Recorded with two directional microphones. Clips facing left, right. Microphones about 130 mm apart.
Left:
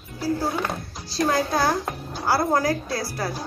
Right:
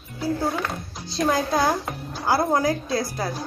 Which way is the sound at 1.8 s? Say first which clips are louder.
Left 1 dB; centre (ahead or behind).